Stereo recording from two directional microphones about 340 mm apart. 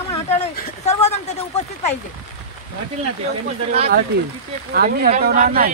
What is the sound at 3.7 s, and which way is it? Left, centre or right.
Speech, centre.